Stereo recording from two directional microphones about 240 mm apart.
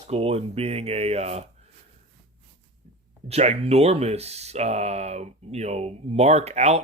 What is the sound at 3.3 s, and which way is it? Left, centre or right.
Speech, right.